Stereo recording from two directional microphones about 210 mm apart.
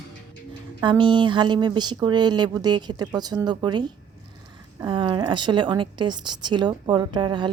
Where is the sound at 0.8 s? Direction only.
20° right (ahead or behind).